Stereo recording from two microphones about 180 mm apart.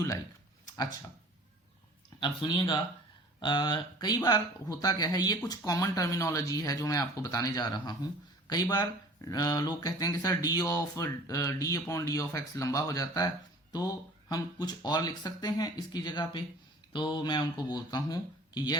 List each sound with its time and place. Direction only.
2.2 s speech: 25° left (ahead or behind)